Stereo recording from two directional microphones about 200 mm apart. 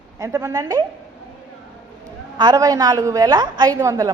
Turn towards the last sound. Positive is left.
turn(degrees=-15)  # may be behind; listen again after turning